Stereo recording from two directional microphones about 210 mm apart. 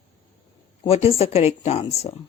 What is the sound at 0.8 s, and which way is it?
Speech, 30° left (ahead or behind).